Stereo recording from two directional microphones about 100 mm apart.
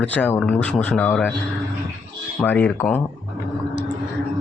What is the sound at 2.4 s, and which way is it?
Speech, 15° left (ahead or behind).